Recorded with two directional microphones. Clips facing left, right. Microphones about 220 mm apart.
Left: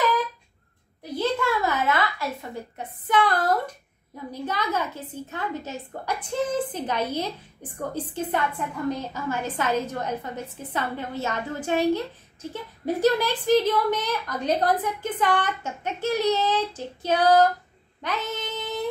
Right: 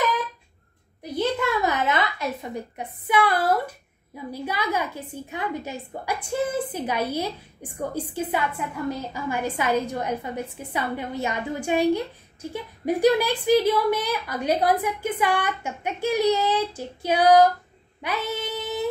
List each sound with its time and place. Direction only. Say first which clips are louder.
1.1 s a sound: right 1 dB; 20° right (ahead or behind)
3.1 s a woman's voice: right 1 dB; 10° right (ahead or behind)
18.0 s child singing: right 2 dB; 10° right (ahead or behind)